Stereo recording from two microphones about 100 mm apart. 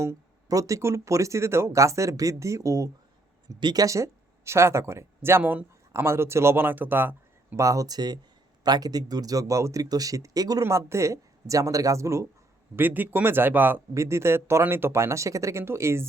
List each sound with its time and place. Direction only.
0.0 s speech: 30° right (ahead or behind)
3.8 s speech: 30° right (ahead or behind)
7.6 s speech: 35° right (ahead or behind)
10.6 s speech: 30° right (ahead or behind)
12.7 s speech: 20° right (ahead or behind)